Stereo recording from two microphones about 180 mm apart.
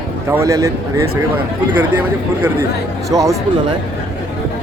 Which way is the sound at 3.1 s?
20° right (ahead or behind).